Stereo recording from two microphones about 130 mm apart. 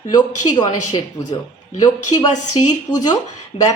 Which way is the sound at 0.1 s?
30° left (ahead or behind).